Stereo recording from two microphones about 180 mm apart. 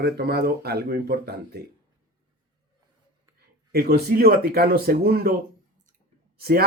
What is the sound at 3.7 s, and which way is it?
Speech, 60° right (ahead or behind).